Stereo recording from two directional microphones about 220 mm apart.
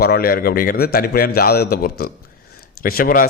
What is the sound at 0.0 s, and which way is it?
A man's voice, 45° left (ahead or behind).